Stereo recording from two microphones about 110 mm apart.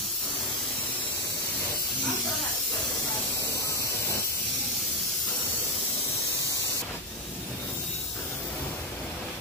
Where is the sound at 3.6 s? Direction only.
25° left (ahead or behind).